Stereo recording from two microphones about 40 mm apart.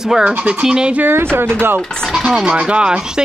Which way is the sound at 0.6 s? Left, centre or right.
Right.